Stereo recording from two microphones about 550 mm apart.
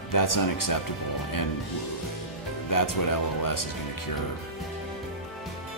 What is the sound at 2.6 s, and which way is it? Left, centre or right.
Speech, left.